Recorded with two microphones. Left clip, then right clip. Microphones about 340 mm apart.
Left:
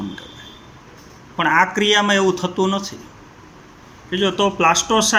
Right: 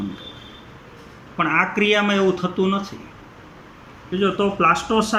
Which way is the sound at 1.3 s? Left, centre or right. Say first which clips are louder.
Left 3 dB; left.